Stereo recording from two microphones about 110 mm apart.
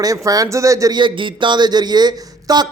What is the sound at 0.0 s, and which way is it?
Speech, 35° right (ahead or behind).